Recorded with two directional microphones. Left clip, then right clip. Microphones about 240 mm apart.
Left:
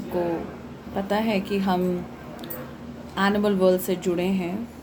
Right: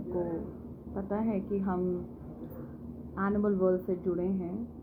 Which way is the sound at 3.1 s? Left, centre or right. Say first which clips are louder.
Left 8 dB; left.